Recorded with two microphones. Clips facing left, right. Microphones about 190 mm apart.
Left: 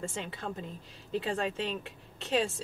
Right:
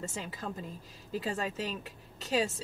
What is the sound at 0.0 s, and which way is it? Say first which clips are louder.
Speech: left 2 dB; 5° right (ahead or behind).